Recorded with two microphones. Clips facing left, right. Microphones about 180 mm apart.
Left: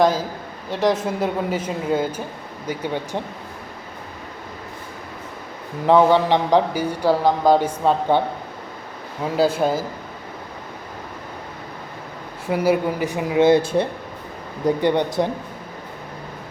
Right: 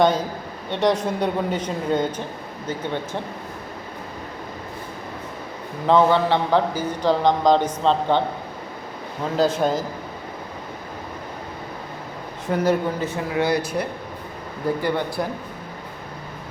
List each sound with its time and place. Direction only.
0.0 s a man's voice: centre (ahead or behind)
5.8 s a man's voice: 15° left (ahead or behind)
9.2 s a man's voice: 10° left (ahead or behind)
12.5 s a man's voice: 10° left (ahead or behind)